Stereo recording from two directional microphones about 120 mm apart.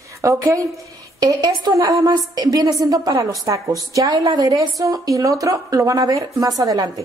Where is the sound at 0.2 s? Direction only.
25° right (ahead or behind).